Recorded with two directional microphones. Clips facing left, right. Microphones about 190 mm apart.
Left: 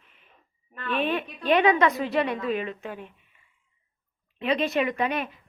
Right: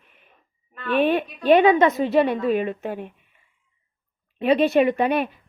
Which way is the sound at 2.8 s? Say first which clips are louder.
Right 7 dB; 50° right (ahead or behind).